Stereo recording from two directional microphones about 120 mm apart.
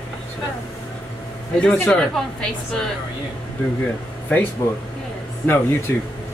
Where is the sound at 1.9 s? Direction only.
5° left (ahead or behind).